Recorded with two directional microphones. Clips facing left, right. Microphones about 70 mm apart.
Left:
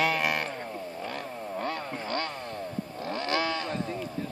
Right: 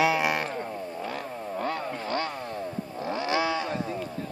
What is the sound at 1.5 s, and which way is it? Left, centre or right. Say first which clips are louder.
Chainsaw: right 3 dB; centre.